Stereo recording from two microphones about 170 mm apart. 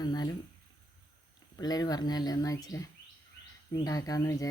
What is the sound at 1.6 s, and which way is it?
Speech, 25° left (ahead or behind).